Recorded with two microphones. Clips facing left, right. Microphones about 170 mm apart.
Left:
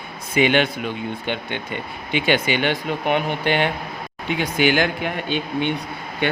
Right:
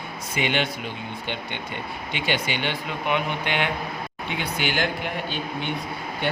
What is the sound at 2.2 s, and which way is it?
Speech, 55° left (ahead or behind).